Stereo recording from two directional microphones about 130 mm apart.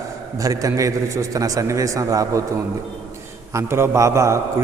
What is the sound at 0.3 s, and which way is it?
A man's voice, 25° right (ahead or behind).